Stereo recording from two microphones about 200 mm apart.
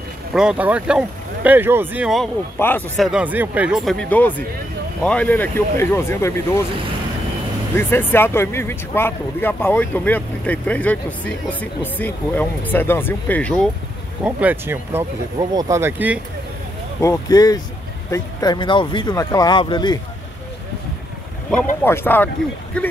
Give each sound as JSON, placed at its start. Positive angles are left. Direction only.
{"t": 0.3, "sound": "speech", "side_deg": -5}
{"t": 2.6, "sound": "speech", "side_deg": 10}
{"t": 3.1, "sound": "speech", "side_deg": -5}
{"t": 7.7, "sound": "speech", "side_deg": 10}
{"t": 14.2, "sound": "speech", "side_deg": -10}
{"t": 17.0, "sound": "speech", "side_deg": 15}
{"t": 21.5, "sound": "speech", "side_deg": 10}